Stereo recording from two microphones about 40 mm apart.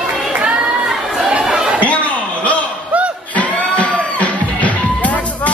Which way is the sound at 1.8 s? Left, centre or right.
Left.